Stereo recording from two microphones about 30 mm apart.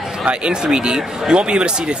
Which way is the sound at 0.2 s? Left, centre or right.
Right.